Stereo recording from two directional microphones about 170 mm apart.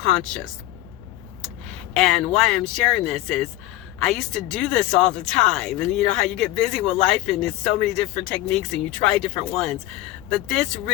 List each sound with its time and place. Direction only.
0.0 s speech: 5° left (ahead or behind)
1.9 s speech: 5° left (ahead or behind)